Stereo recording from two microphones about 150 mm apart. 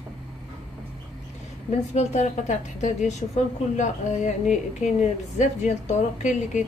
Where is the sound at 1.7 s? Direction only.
45° left (ahead or behind).